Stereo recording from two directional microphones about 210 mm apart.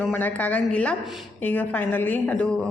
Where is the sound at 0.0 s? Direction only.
5° left (ahead or behind).